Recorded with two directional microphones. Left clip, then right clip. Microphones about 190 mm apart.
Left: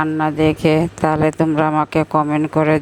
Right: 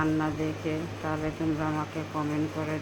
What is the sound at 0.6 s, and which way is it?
Speech, 65° left (ahead or behind).